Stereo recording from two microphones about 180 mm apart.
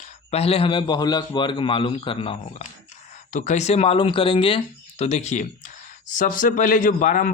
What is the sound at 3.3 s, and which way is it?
A man's voice, 45° left (ahead or behind).